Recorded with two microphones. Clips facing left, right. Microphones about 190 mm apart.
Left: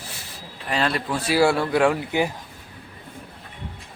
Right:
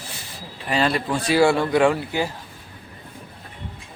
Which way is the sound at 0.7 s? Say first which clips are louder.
Right 2 dB; centre (ahead or behind).